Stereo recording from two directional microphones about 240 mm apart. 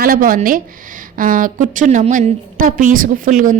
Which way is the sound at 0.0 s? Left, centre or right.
Right.